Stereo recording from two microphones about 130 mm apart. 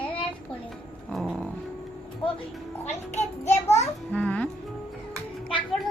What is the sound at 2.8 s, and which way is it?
A child's voice, 60° left (ahead or behind).